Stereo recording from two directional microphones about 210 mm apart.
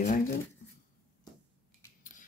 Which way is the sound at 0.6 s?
40° left (ahead or behind).